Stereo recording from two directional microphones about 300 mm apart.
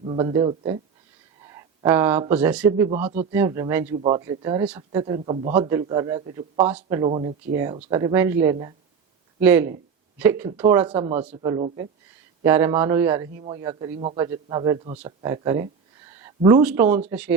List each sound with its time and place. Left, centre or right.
0.0 s a man's voice: centre